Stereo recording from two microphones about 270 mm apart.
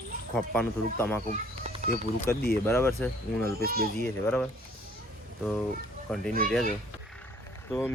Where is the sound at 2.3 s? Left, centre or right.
Centre.